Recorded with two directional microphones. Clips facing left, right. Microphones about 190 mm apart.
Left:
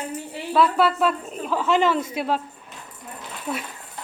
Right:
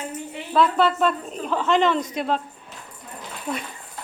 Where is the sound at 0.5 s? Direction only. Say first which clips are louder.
Even; 5° left (ahead or behind).